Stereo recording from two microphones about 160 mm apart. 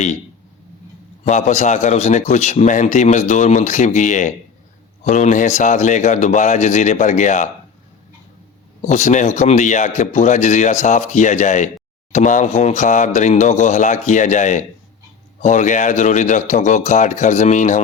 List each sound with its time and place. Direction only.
1.2 s a man's voice: 45° left (ahead or behind)
8.8 s a man's voice: 45° left (ahead or behind)